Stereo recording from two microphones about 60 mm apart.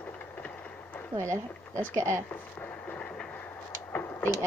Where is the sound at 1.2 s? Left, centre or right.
Right.